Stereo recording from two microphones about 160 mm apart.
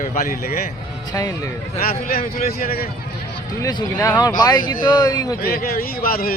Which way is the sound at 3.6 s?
20° left (ahead or behind).